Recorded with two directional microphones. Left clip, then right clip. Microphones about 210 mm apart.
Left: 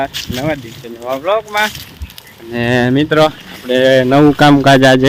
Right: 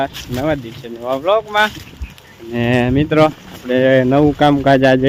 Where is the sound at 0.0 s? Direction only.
10° right (ahead or behind).